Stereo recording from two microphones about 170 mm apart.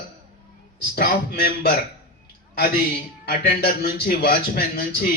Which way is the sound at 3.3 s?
60° left (ahead or behind).